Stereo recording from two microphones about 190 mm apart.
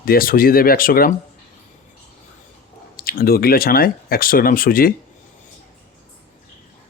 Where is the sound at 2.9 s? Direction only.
50° left (ahead or behind).